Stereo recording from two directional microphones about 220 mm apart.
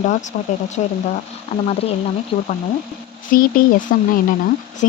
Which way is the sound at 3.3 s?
40° left (ahead or behind).